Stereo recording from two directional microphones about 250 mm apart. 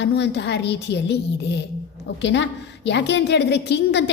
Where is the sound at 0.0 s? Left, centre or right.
Left.